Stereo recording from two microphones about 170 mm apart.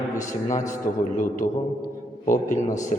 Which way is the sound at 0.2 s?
45° left (ahead or behind).